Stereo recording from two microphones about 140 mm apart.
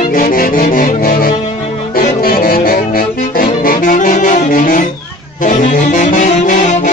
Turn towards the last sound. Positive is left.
turn(degrees=65)  # may be behind; listen again after turning